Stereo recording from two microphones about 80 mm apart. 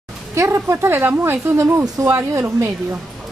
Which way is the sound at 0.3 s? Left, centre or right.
Right.